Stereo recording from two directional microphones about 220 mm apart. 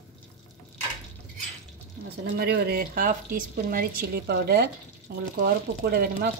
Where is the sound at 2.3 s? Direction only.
45° right (ahead or behind).